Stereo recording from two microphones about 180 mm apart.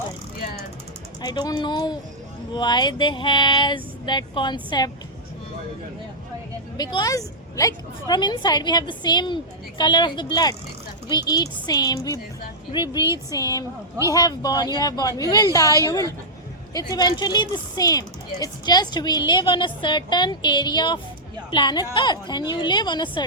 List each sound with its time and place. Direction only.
1.2 s a woman's voice: 20° left (ahead or behind)
6.7 s a woman's voice: 20° left (ahead or behind)